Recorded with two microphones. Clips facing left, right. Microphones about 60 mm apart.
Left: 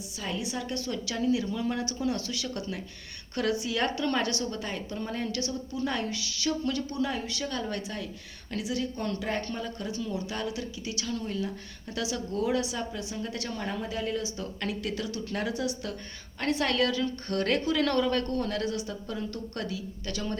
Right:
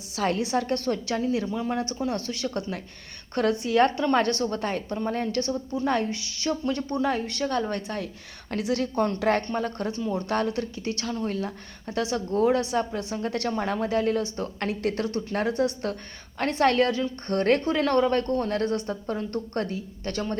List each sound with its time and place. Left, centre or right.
0.1 s a woman's voice: right
1.5 s speech: right
1.7 s a woman's voice: right
9.6 s a woman's voice: right